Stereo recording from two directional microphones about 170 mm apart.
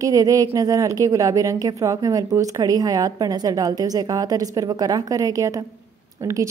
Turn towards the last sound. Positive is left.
turn(degrees=-20)  # may be behind; listen again after turning